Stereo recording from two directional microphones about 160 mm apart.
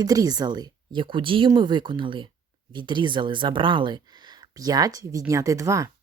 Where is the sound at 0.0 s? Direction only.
25° right (ahead or behind).